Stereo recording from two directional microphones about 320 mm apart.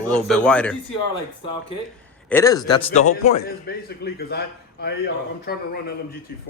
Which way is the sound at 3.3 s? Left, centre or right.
Left.